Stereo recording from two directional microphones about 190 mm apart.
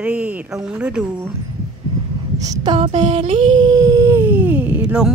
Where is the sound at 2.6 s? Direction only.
30° right (ahead or behind).